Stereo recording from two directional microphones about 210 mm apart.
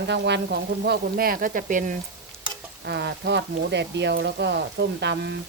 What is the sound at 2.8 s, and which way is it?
Speech, 55° right (ahead or behind).